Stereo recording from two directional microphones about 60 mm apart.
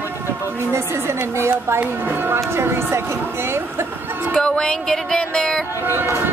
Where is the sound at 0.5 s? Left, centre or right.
Right.